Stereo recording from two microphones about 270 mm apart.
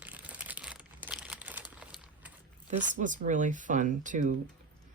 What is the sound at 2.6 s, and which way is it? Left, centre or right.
A woman's voice, right.